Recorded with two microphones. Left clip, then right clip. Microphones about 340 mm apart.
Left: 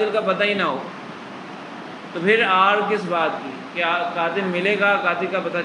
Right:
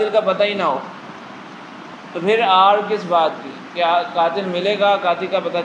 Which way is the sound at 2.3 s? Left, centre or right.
Centre.